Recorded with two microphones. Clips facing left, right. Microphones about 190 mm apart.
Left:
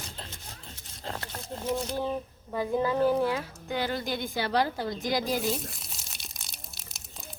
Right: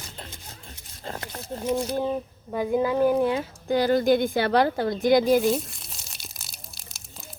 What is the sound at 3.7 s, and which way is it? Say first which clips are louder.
Speech: right 11 dB; 45° right (ahead or behind).